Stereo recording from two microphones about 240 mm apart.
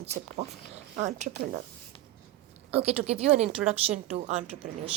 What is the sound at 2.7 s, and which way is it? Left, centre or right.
Speech, right.